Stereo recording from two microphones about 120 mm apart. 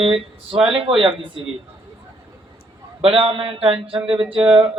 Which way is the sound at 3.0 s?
50° right (ahead or behind).